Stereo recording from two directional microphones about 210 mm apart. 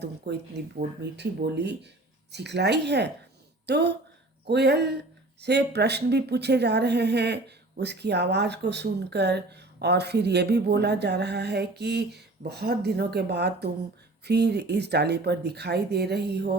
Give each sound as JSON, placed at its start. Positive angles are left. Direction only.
{"t": 0.3, "sound": "a woman's voice", "side_deg": -50}